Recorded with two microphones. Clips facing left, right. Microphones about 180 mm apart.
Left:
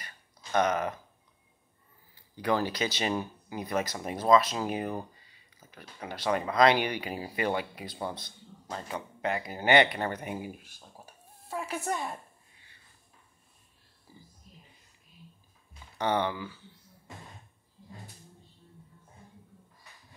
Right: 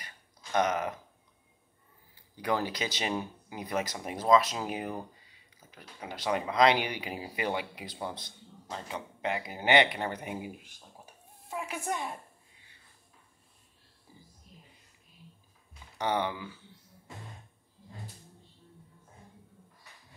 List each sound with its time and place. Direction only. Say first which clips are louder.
0.0 s a sound: left 1 dB; 15° right (ahead or behind)
2.3 s a woman's voice: left 2 dB; 15° right (ahead or behind)
14.1 s whispering: left 2 dB; 20° right (ahead or behind)
16.0 s speech: left 2 dB; 15° right (ahead or behind)